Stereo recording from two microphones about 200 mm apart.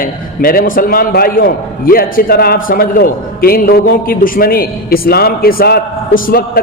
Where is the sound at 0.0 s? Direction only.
45° left (ahead or behind).